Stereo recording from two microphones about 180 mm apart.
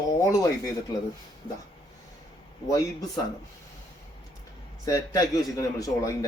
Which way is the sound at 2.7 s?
20° left (ahead or behind).